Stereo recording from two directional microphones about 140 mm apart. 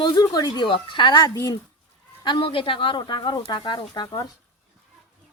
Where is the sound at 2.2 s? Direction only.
35° left (ahead or behind).